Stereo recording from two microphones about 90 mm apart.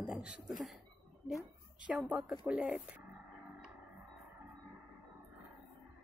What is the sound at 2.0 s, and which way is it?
Speech, 5° right (ahead or behind).